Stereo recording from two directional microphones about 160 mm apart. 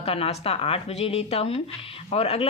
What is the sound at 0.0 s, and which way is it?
Speech, 40° left (ahead or behind).